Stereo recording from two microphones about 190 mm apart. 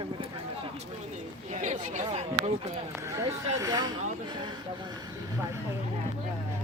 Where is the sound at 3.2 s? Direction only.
15° right (ahead or behind).